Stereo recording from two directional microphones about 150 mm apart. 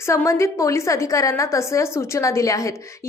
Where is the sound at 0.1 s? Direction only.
20° left (ahead or behind).